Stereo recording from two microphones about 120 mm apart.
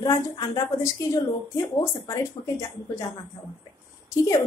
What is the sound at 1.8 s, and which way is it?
A woman's voice, 25° left (ahead or behind).